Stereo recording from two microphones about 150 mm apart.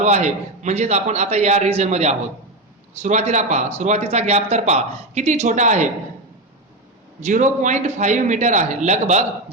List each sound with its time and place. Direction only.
0.0 s speech: 50° right (ahead or behind)
7.2 s speech: 55° right (ahead or behind)